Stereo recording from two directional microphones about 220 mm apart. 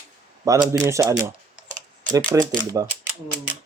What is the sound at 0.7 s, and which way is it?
Speech, 15° right (ahead or behind).